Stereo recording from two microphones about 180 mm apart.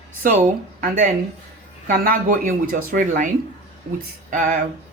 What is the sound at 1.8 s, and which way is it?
Speech, 55° right (ahead or behind).